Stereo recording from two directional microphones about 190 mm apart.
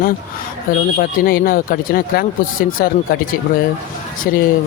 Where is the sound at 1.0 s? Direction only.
50° left (ahead or behind).